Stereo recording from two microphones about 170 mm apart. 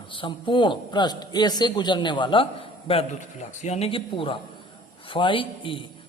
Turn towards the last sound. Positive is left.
turn(degrees=30)  # may be behind; listen again after turning